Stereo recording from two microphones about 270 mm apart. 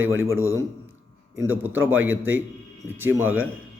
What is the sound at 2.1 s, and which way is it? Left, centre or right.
Speech, right.